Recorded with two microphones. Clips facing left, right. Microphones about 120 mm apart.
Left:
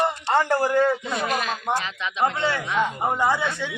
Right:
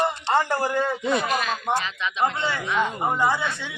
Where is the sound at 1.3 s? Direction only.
20° right (ahead or behind).